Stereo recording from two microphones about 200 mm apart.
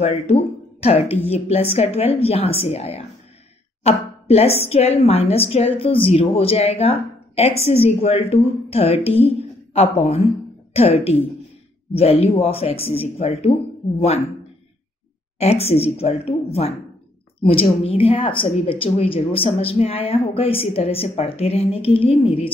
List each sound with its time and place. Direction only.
0.0 s a woman's voice: 30° left (ahead or behind)
15.3 s a woman's voice: 30° left (ahead or behind)